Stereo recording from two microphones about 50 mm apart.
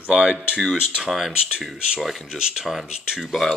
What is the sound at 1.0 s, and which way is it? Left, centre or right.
Speech, centre.